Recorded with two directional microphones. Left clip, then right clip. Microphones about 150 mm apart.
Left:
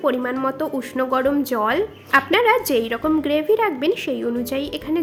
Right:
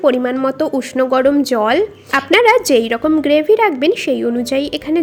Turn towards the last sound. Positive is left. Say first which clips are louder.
# right 7 dB
turn(degrees=-30)  # may be behind; listen again after turning